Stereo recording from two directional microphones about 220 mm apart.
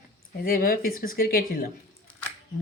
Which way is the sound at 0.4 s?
40° left (ahead or behind).